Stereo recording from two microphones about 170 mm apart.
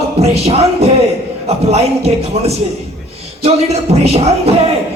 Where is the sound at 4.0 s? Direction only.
40° right (ahead or behind).